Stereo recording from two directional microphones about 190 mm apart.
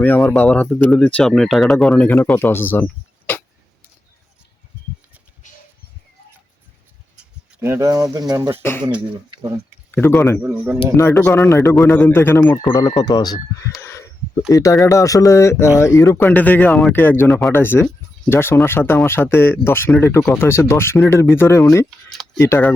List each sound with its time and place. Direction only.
0.0 s speech: 10° left (ahead or behind)
7.6 s speech: 15° right (ahead or behind)
9.9 s speech: 10° left (ahead or behind)
10.4 s speech: 5° right (ahead or behind)
10.9 s speech: 15° left (ahead or behind)
12.6 s speech: 20° left (ahead or behind)
13.8 s a sound: 15° left (ahead or behind)
14.5 s speech: 20° left (ahead or behind)